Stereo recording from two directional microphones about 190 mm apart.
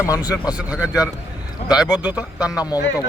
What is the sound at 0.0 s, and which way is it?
A man's voice, 20° left (ahead or behind).